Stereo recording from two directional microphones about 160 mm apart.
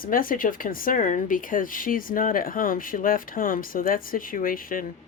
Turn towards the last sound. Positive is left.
turn(degrees=60)  # may be behind; listen again after turning